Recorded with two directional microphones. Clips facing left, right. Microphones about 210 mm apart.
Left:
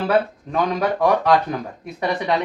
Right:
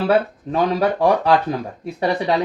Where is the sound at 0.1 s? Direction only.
30° right (ahead or behind).